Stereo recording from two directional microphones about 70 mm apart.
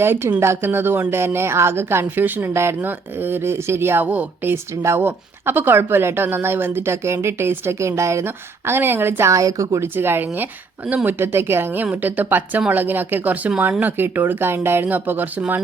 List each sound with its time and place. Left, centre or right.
0.0 s a woman's voice: right
4.8 s a woman's voice: right
9.3 s a woman's voice: right
9.8 s a woman's voice: right